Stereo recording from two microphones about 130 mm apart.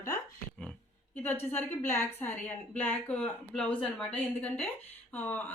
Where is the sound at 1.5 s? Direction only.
15° left (ahead or behind).